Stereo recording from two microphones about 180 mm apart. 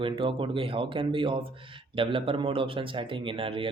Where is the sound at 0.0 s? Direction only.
30° right (ahead or behind).